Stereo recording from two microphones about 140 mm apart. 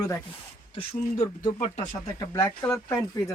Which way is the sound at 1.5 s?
60° left (ahead or behind).